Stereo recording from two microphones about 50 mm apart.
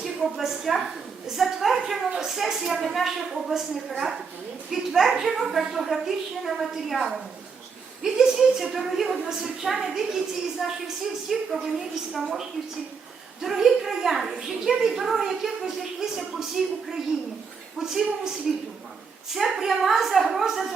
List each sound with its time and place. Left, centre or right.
0.0 s a woman's voice: centre
8.0 s a woman's voice: centre
19.3 s a woman's voice: centre